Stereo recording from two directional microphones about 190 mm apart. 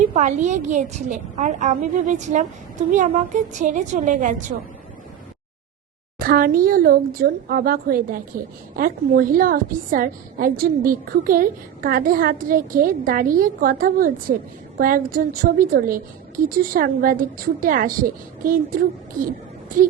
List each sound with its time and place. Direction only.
0.1 s a woman's voice: 40° right (ahead or behind)
6.1 s a woman's voice: 50° right (ahead or behind)